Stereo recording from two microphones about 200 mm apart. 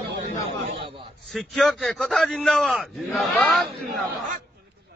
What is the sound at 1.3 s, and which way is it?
A man's voice, centre (ahead or behind).